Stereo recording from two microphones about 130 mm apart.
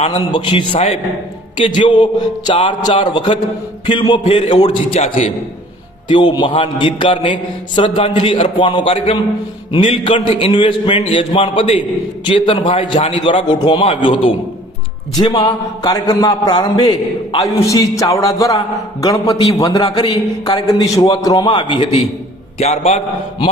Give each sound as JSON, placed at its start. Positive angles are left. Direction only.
{"t": 0.0, "sound": "a man's voice", "side_deg": 40}
{"t": 4.6, "sound": "a man's voice", "side_deg": 55}
{"t": 6.1, "sound": "a man's voice", "side_deg": 35}
{"t": 19.8, "sound": "a man's voice", "side_deg": 35}